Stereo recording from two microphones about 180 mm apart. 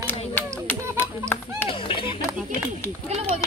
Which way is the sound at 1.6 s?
30° left (ahead or behind).